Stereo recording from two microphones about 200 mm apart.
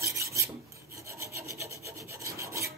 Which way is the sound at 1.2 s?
15° right (ahead or behind).